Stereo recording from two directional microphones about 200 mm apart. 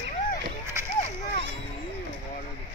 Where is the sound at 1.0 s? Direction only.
30° left (ahead or behind).